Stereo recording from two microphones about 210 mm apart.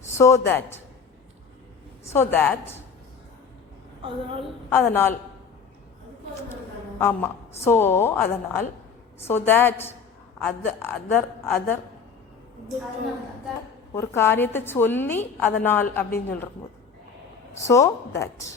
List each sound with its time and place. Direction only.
0.0 s a sound: 15° left (ahead or behind)
0.4 s a woman's voice: 10° left (ahead or behind)
2.1 s a woman's voice: 10° left (ahead or behind)
4.0 s a woman's voice: 25° right (ahead or behind)
4.7 s a woman's voice: 10° left (ahead or behind)
7.0 s a woman's voice: 10° left (ahead or behind)
13.9 s a woman's voice: 10° left (ahead or behind)
17.7 s a woman's voice: 15° left (ahead or behind)